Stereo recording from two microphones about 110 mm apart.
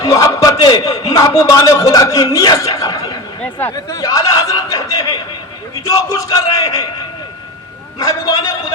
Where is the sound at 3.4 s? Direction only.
15° left (ahead or behind).